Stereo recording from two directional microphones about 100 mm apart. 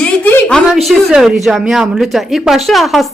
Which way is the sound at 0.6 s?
Centre (ahead or behind).